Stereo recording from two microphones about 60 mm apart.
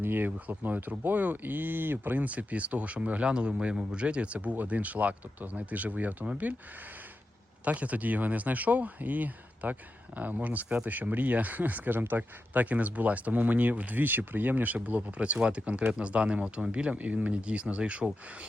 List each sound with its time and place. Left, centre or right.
0.0 s speech: right
0.3 s speech: right
7.6 s speech: right